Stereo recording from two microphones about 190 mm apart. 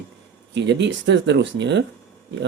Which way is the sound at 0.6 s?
65° right (ahead or behind).